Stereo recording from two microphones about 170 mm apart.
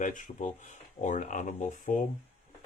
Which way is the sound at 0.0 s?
50° left (ahead or behind).